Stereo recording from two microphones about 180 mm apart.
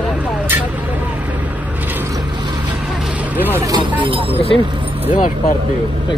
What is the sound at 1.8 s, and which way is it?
Mechanisms, 10° right (ahead or behind).